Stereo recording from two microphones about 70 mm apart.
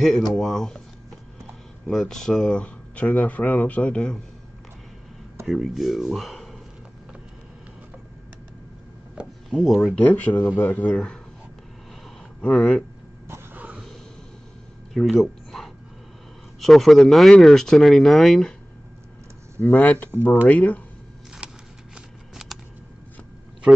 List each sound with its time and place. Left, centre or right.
0.3 s speech: centre
1.9 s speech: centre
5.5 s speech: centre
9.2 s a sound: centre
9.6 s speech: centre
9.9 s speech: left
12.4 s speech: centre
13.6 s a sound: centre
15.0 s speech: centre
19.6 s speech: left
21.4 s shuffling cards: centre